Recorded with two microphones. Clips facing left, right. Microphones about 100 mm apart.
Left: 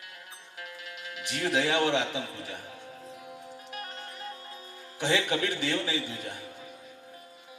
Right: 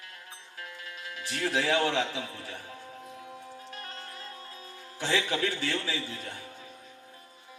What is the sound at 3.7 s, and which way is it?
Wind chime, 15° left (ahead or behind).